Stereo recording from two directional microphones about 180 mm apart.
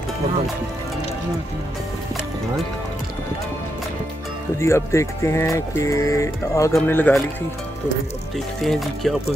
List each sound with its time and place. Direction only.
4.6 s speech: 15° left (ahead or behind)
8.6 s music: centre (ahead or behind)